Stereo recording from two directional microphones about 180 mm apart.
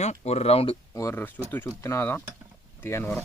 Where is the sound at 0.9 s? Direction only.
15° left (ahead or behind).